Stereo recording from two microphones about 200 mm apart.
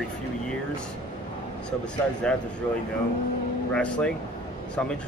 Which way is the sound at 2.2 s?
5° left (ahead or behind).